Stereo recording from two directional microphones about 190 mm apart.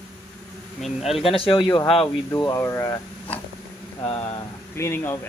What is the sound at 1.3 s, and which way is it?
Speech, 25° left (ahead or behind).